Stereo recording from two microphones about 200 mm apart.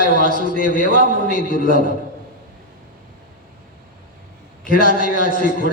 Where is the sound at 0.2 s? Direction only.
45° left (ahead or behind).